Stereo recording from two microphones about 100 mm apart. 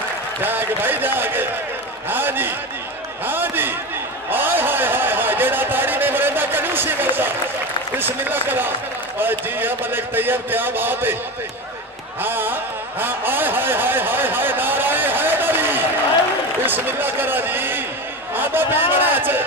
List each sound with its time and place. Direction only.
0.4 s a man's voice: 20° right (ahead or behind)
4.3 s a sound: 20° right (ahead or behind)
7.9 s a man's voice: 20° right (ahead or behind)
12.2 s a man's voice: 20° right (ahead or behind)